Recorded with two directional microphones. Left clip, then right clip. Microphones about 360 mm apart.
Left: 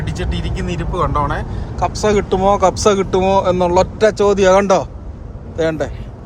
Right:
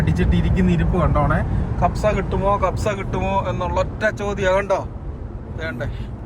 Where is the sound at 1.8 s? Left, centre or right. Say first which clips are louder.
Left 4 dB; centre.